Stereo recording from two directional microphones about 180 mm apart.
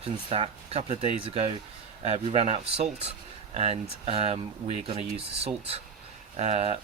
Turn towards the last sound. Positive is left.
turn(degrees=-35)  # may be behind; listen again after turning